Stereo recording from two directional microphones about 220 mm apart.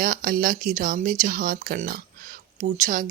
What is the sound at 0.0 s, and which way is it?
Speech, 40° right (ahead or behind).